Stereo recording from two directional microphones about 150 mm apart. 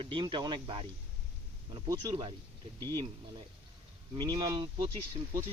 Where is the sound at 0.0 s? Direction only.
35° right (ahead or behind).